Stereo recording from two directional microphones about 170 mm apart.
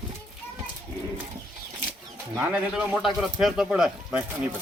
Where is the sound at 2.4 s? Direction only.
10° right (ahead or behind).